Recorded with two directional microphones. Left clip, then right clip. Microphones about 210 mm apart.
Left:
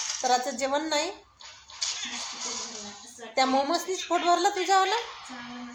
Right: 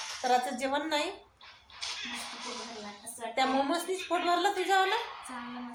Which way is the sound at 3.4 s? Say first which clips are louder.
Left 4 dB; 45° left (ahead or behind).